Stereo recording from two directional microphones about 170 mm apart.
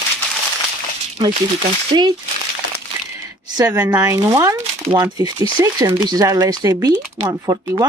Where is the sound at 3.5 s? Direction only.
20° right (ahead or behind).